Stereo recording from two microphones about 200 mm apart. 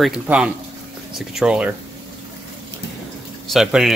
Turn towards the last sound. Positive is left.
turn(degrees=0)  # may be behind; listen again after turning